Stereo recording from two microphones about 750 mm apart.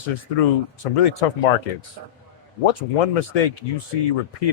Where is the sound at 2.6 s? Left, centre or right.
Left.